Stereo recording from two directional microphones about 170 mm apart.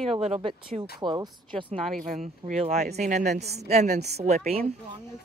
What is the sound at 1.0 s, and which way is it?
Speech, 30° right (ahead or behind).